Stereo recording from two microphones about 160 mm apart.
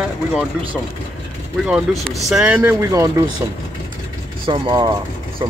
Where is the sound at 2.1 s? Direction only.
Centre (ahead or behind).